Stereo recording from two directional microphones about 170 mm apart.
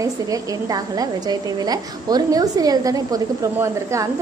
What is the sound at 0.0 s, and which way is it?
A woman's voice, 20° right (ahead or behind).